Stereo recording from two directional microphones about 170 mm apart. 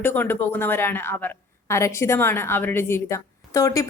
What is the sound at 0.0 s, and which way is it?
A woman's voice, 10° left (ahead or behind).